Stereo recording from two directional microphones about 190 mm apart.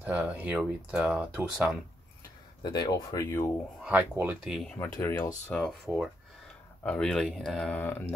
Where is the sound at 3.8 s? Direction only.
10° right (ahead or behind).